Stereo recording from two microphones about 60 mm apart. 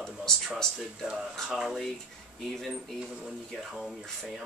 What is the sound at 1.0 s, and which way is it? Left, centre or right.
Speech, centre.